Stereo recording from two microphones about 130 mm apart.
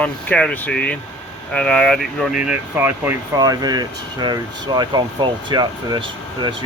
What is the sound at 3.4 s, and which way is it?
Speech, 30° right (ahead or behind).